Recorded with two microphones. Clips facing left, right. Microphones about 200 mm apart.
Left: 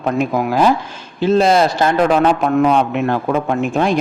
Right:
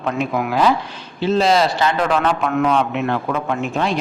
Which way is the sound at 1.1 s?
50° left (ahead or behind).